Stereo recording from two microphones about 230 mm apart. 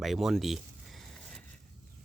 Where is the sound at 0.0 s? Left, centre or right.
Centre.